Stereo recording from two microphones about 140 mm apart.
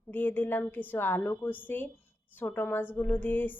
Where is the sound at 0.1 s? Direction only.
15° left (ahead or behind).